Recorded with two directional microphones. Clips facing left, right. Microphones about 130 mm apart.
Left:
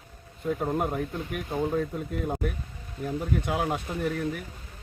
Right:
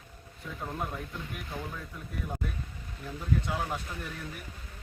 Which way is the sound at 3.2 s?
50° left (ahead or behind).